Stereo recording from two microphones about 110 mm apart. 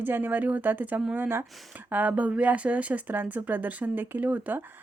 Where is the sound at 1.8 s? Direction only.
15° right (ahead or behind).